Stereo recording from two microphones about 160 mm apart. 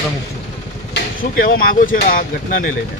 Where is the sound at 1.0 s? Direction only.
65° left (ahead or behind).